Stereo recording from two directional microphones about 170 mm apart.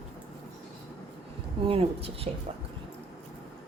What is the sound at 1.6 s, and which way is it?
Speech, 35° right (ahead or behind).